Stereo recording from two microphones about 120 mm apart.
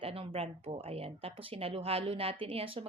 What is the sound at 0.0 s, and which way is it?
A woman's voice, 50° right (ahead or behind).